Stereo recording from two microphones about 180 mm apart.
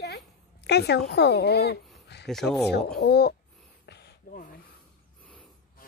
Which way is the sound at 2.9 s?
65° left (ahead or behind).